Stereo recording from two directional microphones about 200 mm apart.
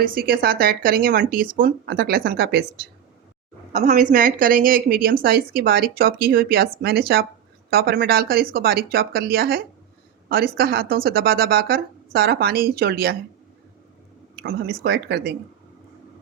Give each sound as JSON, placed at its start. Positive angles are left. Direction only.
{"t": 0.0, "sound": "a woman's voice", "side_deg": -45}
{"t": 3.7, "sound": "a woman's voice", "side_deg": -35}
{"t": 14.3, "sound": "a woman's voice", "side_deg": -50}